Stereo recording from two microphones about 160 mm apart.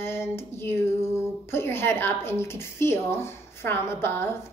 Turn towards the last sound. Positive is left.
turn(degrees=15)  # may be behind; listen again after turning